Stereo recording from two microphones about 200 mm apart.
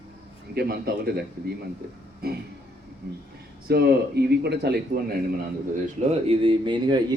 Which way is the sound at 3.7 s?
55° right (ahead or behind).